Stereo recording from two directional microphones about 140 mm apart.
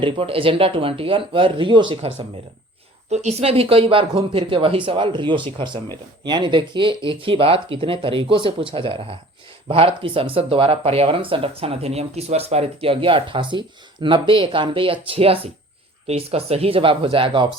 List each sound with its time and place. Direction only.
0.0 s speech: 40° right (ahead or behind)
3.1 s speech: 55° right (ahead or behind)